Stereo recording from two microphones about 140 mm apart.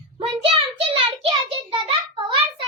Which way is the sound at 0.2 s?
35° right (ahead or behind).